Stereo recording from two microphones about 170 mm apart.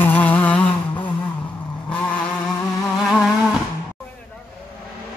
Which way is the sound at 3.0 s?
5° right (ahead or behind).